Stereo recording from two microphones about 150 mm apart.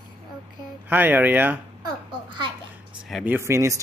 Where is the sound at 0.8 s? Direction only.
10° right (ahead or behind).